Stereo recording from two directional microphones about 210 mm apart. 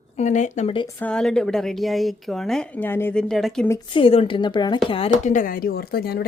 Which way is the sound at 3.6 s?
20° left (ahead or behind).